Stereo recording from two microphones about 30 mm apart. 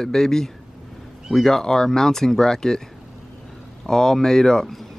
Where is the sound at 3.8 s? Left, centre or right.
Centre.